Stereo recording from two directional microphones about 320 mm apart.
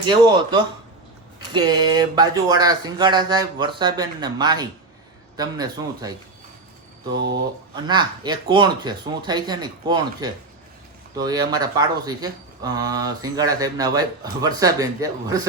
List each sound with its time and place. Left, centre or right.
0.0 s speech: centre
7.1 s speech: right
7.9 s speech: centre